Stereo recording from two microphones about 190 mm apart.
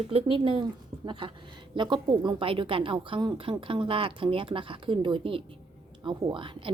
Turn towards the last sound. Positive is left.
turn(degrees=-25)  # may be behind; listen again after turning